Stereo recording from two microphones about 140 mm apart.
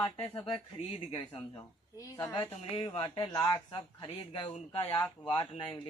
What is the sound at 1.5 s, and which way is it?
Speech, 25° left (ahead or behind).